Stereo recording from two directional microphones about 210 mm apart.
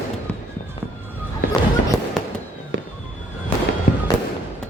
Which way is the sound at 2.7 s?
60° right (ahead or behind).